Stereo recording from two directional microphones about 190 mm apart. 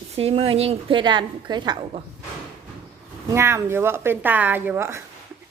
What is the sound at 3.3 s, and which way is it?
Speech, 15° right (ahead or behind).